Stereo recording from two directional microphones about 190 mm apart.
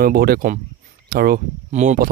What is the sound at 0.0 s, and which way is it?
Speech, 50° right (ahead or behind).